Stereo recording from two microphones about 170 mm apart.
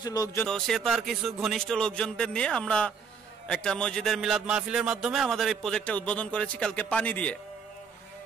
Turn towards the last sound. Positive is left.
turn(degrees=10)  # may be behind; listen again after turning